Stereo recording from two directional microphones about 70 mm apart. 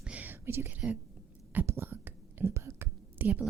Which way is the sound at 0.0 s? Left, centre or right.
Right.